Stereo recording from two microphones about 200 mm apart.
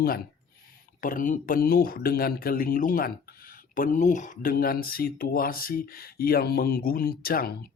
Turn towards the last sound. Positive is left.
turn(degrees=50)  # may be behind; listen again after turning